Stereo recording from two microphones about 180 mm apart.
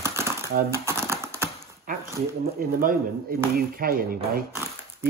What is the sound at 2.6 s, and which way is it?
Speech, 50° right (ahead or behind).